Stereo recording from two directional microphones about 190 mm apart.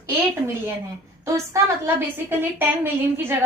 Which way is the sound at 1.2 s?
15° right (ahead or behind).